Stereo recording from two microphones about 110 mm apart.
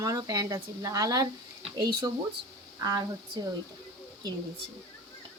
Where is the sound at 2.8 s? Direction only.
30° right (ahead or behind).